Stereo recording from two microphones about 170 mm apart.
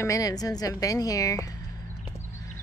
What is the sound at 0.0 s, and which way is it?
Speech, 20° left (ahead or behind).